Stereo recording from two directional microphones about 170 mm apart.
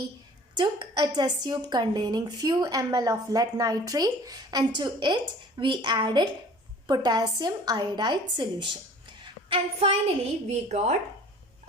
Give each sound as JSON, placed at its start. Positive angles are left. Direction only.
{"t": 0.5, "sound": "a woman's voice", "side_deg": -25}
{"t": 9.2, "sound": "a sound", "side_deg": -30}
{"t": 10.5, "sound": "a woman's voice", "side_deg": -40}